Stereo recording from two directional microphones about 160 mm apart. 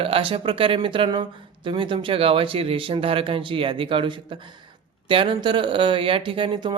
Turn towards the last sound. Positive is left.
turn(degrees=-30)  # may be behind; listen again after turning